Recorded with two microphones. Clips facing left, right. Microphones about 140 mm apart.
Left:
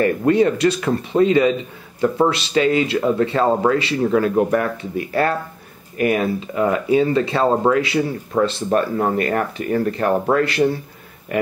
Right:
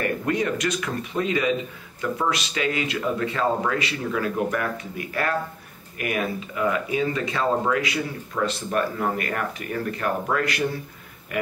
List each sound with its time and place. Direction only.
0.0 s speech: 30° left (ahead or behind)